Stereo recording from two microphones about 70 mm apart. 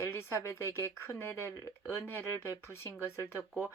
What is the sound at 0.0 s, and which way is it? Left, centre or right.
A woman's voice, left.